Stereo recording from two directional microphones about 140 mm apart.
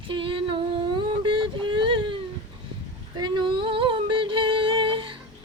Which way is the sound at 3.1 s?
35° right (ahead or behind).